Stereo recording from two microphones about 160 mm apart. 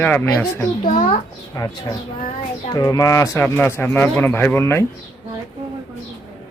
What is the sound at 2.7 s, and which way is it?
Speech, 20° left (ahead or behind).